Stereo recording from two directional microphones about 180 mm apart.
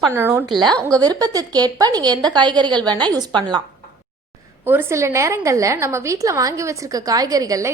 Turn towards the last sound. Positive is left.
turn(degrees=-20)  # may be behind; listen again after turning